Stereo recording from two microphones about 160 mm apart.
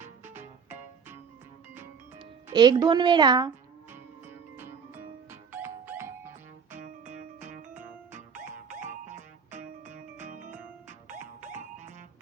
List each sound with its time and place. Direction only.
0.0 s music: 15° right (ahead or behind)
2.1 s speech: 25° right (ahead or behind)
4.3 s music: 15° right (ahead or behind)
6.7 s music: 50° right (ahead or behind)
8.7 s music: 50° right (ahead or behind)